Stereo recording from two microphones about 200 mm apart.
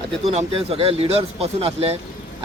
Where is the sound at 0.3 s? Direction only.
30° right (ahead or behind).